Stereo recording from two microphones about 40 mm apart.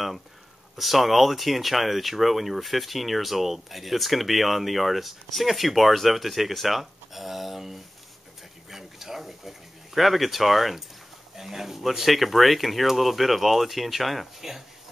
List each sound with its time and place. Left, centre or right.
0.7 s speech: centre